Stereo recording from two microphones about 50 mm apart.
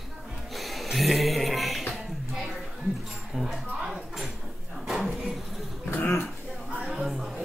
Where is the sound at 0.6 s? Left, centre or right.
Centre.